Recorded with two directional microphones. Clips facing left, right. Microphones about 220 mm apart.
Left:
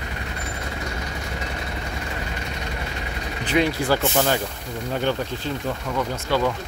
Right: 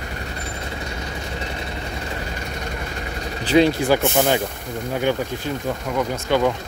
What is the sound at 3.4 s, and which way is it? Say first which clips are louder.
Speech: right 6 dB; 30° right (ahead or behind).